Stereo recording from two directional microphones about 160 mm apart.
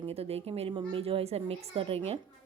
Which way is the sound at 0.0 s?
40° right (ahead or behind).